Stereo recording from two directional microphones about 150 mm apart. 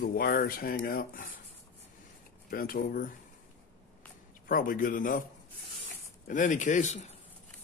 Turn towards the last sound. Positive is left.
turn(degrees=50)  # may be behind; listen again after turning